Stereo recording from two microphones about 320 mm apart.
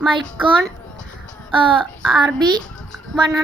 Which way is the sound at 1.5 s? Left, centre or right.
Centre.